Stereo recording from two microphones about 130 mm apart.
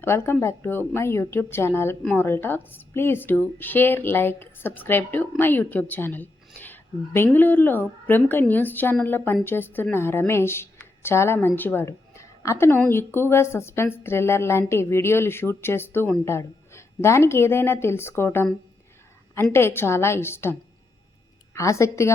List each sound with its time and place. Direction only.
0.0 s a woman's voice: 20° left (ahead or behind)
19.5 s speech: 20° left (ahead or behind)